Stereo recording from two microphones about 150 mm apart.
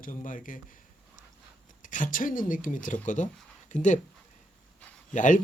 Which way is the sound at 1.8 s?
60° left (ahead or behind).